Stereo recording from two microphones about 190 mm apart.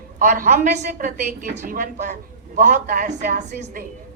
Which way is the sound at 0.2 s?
45° right (ahead or behind).